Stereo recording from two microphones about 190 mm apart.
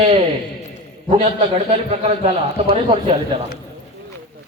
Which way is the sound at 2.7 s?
25° right (ahead or behind).